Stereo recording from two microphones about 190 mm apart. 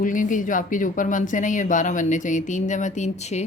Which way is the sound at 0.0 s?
45° left (ahead or behind).